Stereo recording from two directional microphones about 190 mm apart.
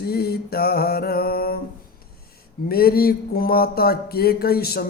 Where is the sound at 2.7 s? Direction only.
55° left (ahead or behind).